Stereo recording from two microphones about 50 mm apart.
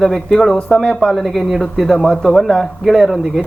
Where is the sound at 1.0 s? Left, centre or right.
Centre.